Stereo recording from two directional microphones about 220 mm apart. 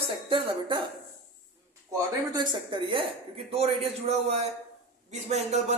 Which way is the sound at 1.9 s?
20° right (ahead or behind).